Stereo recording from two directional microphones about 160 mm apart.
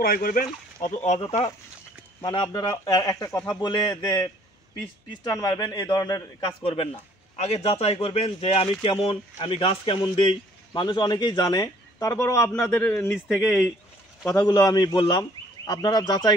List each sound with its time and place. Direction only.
0.0 s speech: 65° left (ahead or behind)
0.8 s speech: 45° left (ahead or behind)
2.2 s speech: 25° left (ahead or behind)
5.3 s speech: 25° left (ahead or behind)
6.6 s a man's voice: 35° left (ahead or behind); by 13.2 s 10° left (ahead or behind)
13.3 s speech: centre (ahead or behind)
14.3 s speech: 25° left (ahead or behind)